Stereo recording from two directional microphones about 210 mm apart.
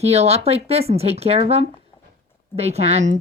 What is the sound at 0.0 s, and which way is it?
A woman's voice, 30° right (ahead or behind).